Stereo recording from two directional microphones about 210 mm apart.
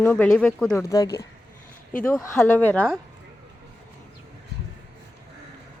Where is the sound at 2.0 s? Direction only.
10° left (ahead or behind).